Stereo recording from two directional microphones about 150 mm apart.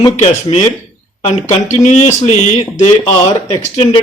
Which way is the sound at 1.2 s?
45° left (ahead or behind).